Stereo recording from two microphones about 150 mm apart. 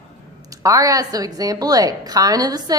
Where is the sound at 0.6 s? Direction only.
20° right (ahead or behind).